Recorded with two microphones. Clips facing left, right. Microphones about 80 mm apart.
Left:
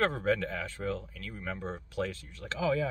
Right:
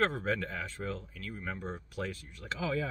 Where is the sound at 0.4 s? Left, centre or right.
Right.